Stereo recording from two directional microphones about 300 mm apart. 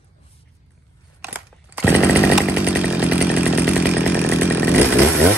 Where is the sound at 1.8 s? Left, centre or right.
Centre.